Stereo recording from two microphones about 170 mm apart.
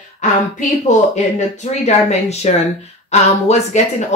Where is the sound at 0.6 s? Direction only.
45° left (ahead or behind).